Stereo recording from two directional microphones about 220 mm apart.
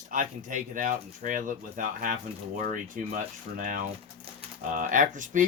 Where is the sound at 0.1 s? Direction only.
35° right (ahead or behind).